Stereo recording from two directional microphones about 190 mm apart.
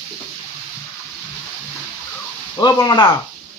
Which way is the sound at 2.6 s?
20° left (ahead or behind).